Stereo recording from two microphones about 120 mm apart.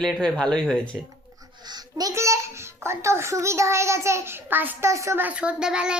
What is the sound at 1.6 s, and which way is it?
A child's voice, 35° right (ahead or behind).